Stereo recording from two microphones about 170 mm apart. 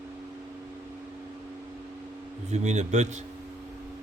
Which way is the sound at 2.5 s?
40° right (ahead or behind).